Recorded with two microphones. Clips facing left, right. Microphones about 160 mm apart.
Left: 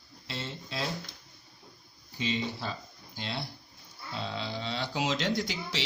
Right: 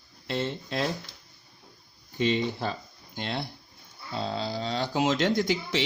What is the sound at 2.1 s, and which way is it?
Speech, 55° right (ahead or behind).